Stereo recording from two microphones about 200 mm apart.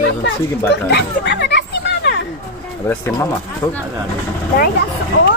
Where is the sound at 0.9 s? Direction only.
55° left (ahead or behind).